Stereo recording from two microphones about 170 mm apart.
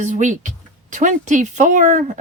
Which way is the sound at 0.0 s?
45° right (ahead or behind).